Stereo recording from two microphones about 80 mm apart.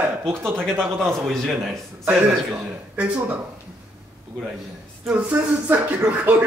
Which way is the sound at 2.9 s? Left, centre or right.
Centre.